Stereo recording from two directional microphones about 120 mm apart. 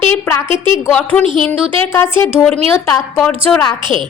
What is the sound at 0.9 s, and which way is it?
Speech, 10° left (ahead or behind).